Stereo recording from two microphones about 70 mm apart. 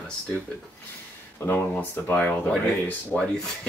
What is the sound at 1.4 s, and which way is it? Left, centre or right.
Speech, left.